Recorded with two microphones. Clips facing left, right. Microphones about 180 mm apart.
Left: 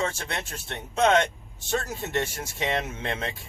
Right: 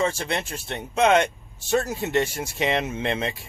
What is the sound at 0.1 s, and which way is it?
Speech, 10° right (ahead or behind).